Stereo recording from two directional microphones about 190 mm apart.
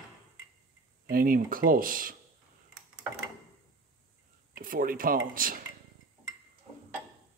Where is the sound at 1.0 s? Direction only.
50° right (ahead or behind).